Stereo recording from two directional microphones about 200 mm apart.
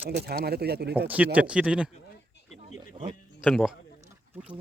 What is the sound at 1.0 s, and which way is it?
Speech, 10° right (ahead or behind).